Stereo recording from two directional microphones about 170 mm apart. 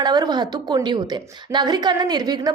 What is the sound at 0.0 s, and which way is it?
A woman's voice, 25° right (ahead or behind).